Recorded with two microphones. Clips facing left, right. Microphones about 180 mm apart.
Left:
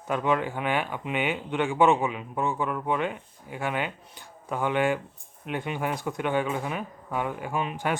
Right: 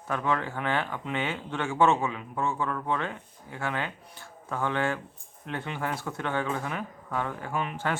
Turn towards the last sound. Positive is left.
turn(degrees=15)  # may be behind; listen again after turning